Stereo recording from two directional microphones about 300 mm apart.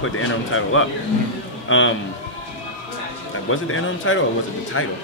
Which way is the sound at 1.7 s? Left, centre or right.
Left.